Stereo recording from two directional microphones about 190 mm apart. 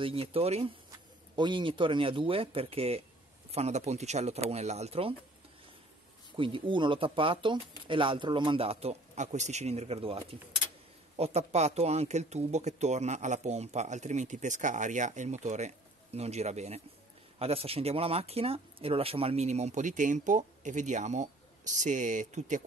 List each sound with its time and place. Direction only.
0.0 s speech: 30° right (ahead or behind)
6.3 s speech: 25° right (ahead or behind)